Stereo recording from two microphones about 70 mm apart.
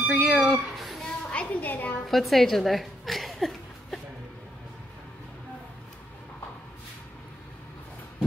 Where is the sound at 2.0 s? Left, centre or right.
Centre.